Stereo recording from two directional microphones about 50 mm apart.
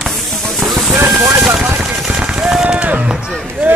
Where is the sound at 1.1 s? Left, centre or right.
Centre.